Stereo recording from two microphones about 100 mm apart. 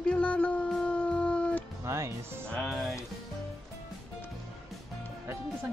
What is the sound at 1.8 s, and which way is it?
Music, 30° right (ahead or behind).